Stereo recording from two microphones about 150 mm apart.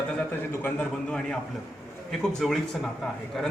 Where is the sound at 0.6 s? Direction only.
5° left (ahead or behind).